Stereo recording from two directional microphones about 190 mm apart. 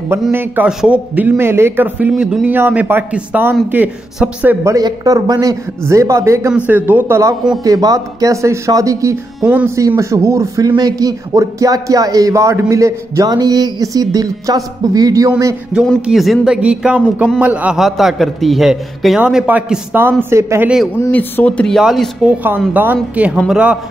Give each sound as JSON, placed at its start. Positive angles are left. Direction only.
{"t": 0.2, "sound": "speech", "side_deg": -10}
{"t": 15.7, "sound": "a man's voice", "side_deg": 0}
{"t": 21.0, "sound": "a man's voice", "side_deg": 10}